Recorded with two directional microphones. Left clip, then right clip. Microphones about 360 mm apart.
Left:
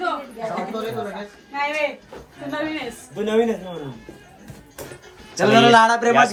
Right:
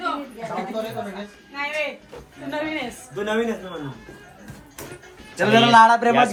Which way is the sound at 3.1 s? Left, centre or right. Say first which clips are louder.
Left 4 dB; centre.